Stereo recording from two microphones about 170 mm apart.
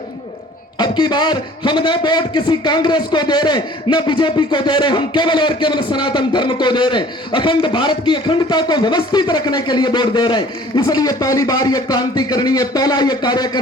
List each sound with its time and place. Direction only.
0.8 s a man's voice: 25° left (ahead or behind)